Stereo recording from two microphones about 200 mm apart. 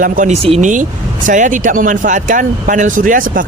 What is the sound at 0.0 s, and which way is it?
Speech, 40° right (ahead or behind).